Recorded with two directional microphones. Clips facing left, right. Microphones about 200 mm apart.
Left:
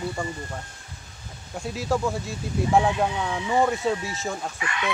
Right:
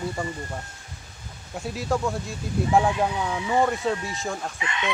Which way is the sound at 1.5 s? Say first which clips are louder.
Left 1 dB; centre (ahead or behind).